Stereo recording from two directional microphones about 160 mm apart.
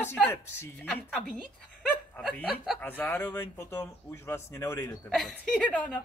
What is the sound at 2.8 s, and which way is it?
Speech, 10° left (ahead or behind).